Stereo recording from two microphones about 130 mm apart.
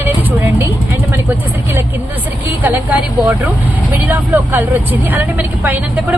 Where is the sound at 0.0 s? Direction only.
15° right (ahead or behind).